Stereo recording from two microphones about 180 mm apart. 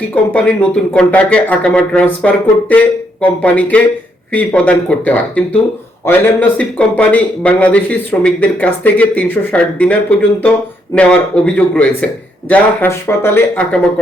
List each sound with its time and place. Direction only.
0.1 s speech: 5° left (ahead or behind)